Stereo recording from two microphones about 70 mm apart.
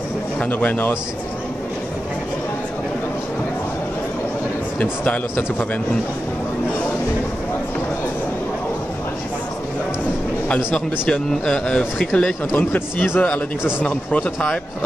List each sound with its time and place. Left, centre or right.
0.4 s speech: left
5.0 s speech: centre
10.5 s speech: centre
12.5 s speech: left
13.8 s speech: centre